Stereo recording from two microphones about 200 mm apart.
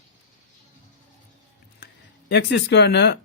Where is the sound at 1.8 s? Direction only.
55° left (ahead or behind).